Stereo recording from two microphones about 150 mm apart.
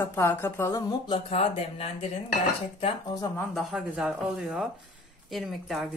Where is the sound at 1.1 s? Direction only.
40° left (ahead or behind).